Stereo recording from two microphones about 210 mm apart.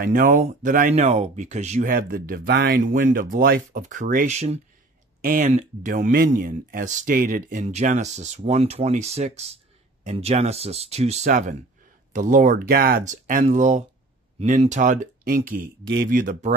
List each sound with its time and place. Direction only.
0.0 s speech: 40° right (ahead or behind)
1.9 s speech: 45° right (ahead or behind)